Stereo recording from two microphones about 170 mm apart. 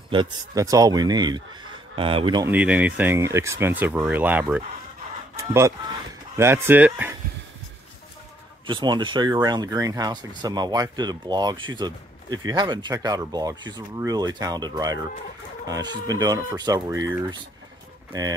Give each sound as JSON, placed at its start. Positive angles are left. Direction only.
{"t": 0.1, "sound": "speech", "side_deg": -25}
{"t": 2.4, "sound": "speech", "side_deg": -10}
{"t": 8.6, "sound": "speech", "side_deg": -25}